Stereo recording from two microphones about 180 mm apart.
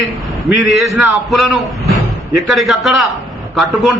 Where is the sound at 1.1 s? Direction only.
5° right (ahead or behind).